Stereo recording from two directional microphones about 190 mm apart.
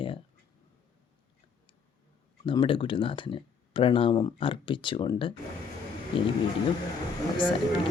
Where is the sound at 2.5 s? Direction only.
25° left (ahead or behind).